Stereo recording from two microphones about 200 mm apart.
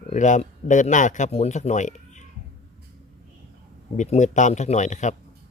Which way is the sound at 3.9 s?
35° left (ahead or behind).